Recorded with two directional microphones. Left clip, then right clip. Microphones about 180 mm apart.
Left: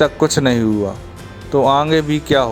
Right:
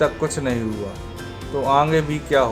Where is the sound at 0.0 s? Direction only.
50° left (ahead or behind).